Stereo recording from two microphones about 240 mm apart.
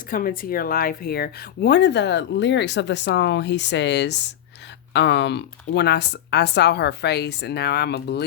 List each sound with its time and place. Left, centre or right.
0.1 s speech: left